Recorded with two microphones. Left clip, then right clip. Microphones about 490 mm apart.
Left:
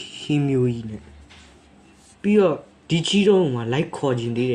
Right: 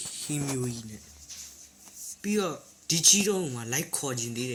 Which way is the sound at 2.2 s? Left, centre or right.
Right.